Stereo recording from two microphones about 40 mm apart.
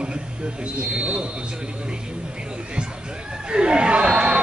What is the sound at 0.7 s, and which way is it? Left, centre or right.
Speech, right.